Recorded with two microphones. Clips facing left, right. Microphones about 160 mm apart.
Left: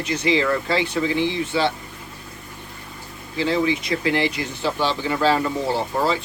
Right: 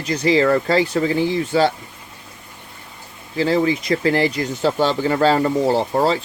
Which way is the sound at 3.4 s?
40° right (ahead or behind).